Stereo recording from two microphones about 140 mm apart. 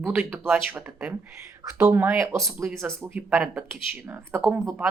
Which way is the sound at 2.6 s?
Centre (ahead or behind).